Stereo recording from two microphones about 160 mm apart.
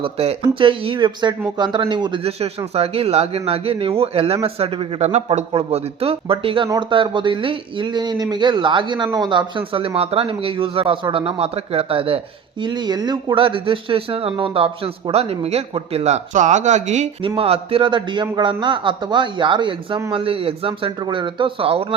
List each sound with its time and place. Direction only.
0.0 s a man's voice: 35° right (ahead or behind)